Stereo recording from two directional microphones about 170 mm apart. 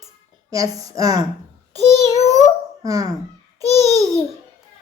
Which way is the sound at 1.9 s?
40° left (ahead or behind).